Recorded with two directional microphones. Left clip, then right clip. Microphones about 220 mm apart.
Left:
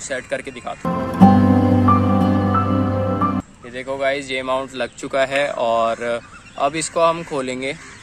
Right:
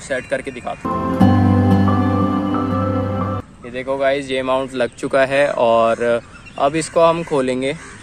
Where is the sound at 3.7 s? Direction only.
5° right (ahead or behind).